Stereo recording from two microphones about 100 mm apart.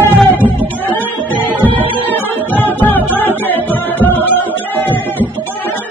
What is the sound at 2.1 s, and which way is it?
Music, 20° left (ahead or behind).